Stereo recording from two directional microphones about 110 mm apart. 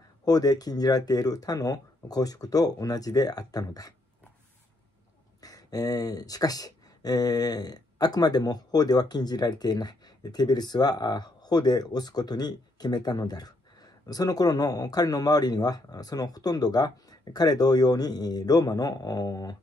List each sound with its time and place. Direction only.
0.2 s speech: 35° left (ahead or behind)
5.4 s speech: 35° left (ahead or behind)